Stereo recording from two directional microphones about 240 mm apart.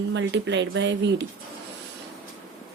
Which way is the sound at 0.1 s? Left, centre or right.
Right.